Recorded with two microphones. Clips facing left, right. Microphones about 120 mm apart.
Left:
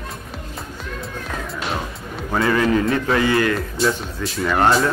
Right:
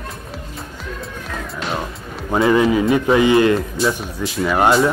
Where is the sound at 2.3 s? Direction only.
20° right (ahead or behind).